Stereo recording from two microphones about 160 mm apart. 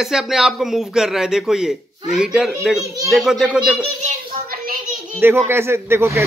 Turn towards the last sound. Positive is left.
turn(degrees=-15)  # may be behind; listen again after turning